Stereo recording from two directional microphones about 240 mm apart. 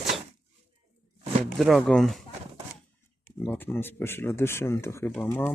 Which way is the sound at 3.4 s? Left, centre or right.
Centre.